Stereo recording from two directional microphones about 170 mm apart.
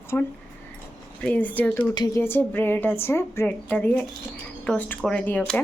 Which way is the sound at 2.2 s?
10° left (ahead or behind).